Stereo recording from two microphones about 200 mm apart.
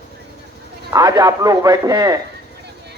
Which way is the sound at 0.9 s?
15° right (ahead or behind).